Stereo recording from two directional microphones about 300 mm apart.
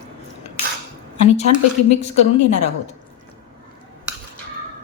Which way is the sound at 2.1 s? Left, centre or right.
Left.